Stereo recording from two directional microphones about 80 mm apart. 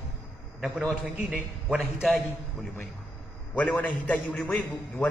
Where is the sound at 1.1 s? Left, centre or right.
Centre.